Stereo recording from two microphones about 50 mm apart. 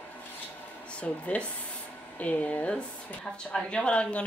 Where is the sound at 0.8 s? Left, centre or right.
Left.